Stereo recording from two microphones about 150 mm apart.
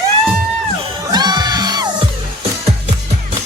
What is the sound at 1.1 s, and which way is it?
Music, 30° right (ahead or behind).